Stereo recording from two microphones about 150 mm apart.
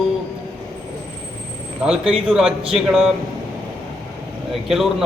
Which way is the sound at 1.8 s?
5° right (ahead or behind).